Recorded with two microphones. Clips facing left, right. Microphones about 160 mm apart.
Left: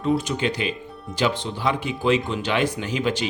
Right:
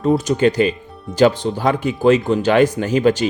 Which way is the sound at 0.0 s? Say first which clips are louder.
Right 7 dB; 45° right (ahead or behind).